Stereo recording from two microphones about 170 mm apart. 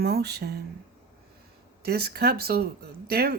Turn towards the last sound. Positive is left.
turn(degrees=-60)  # may be behind; listen again after turning